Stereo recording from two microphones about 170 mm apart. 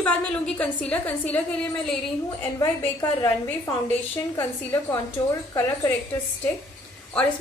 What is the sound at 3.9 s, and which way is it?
A woman's voice, 15° left (ahead or behind).